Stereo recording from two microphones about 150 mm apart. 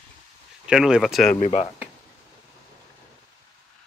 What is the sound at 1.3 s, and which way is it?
Speech, 50° left (ahead or behind).